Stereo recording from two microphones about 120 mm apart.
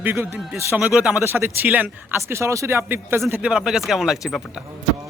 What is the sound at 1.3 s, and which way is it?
Speech, 20° right (ahead or behind).